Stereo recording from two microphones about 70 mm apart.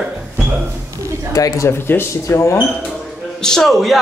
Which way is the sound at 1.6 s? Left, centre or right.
Left.